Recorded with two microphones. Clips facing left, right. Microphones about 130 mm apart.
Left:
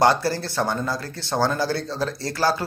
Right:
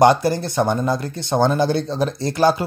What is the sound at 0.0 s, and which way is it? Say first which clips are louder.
Speech: right 5 dB; 20° right (ahead or behind).